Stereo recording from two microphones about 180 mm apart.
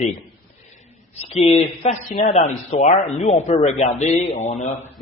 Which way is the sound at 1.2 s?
35° left (ahead or behind).